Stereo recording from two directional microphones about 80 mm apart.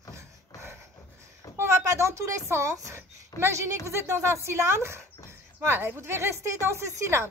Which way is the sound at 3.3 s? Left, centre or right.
Right.